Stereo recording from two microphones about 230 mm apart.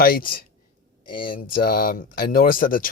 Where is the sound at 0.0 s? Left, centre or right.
Left.